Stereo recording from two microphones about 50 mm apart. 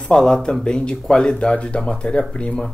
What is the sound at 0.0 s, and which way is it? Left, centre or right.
Speech, centre.